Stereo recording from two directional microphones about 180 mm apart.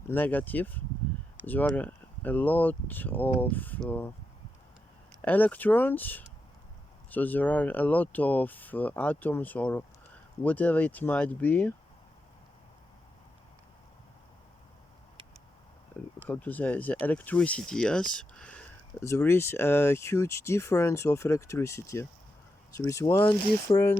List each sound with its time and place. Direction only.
0.1 s speech: 10° left (ahead or behind)
5.2 s speech: 10° left (ahead or behind)
16.2 s speech: 10° left (ahead or behind)